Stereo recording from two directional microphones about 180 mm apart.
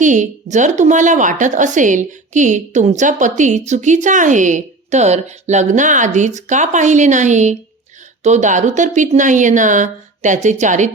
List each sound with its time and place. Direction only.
0.0 s a woman's voice: 45° right (ahead or behind)